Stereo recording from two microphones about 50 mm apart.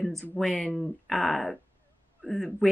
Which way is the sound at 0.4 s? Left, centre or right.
Centre.